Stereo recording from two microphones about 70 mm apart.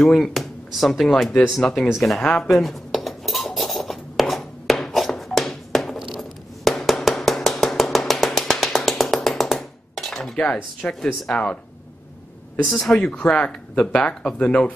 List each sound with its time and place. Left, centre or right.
0.0 s speech: centre
2.4 s cutlery: centre
6.1 s a sound: centre
10.4 s speech: centre
12.6 s speech: centre